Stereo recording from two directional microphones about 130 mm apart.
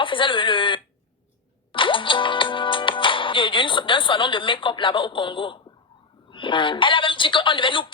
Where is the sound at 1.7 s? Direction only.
40° left (ahead or behind).